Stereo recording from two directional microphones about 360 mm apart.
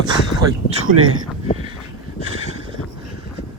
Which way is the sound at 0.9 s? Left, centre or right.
Right.